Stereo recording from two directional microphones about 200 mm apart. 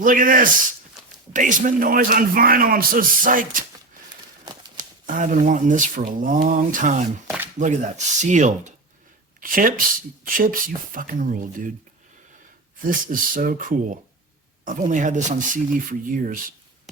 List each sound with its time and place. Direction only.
0.0 s a man's voice: 45° right (ahead or behind)
5.0 s a man's voice: 40° right (ahead or behind)
12.9 s a man's voice: 45° right (ahead or behind)